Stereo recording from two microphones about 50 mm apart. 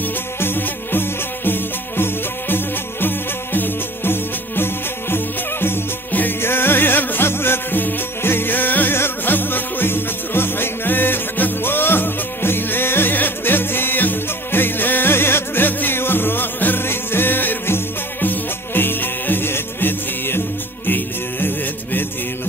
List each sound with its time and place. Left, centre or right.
0.4 s music: left